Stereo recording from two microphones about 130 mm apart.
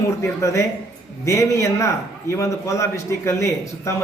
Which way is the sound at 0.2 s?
20° left (ahead or behind).